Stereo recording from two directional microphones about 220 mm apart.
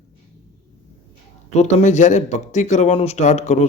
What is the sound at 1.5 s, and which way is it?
Speech, 30° left (ahead or behind).